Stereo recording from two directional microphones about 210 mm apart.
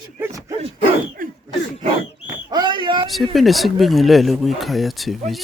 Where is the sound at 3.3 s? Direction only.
Centre (ahead or behind).